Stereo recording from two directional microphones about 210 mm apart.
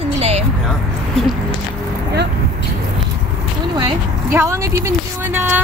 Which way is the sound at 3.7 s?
15° right (ahead or behind).